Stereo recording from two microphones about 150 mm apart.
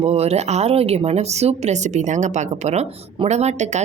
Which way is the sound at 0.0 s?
45° right (ahead or behind).